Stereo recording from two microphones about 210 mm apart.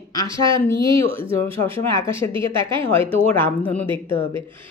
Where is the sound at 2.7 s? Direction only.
25° right (ahead or behind).